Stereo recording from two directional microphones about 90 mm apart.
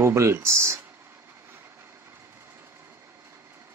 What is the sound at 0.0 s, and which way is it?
Speech, 30° right (ahead or behind).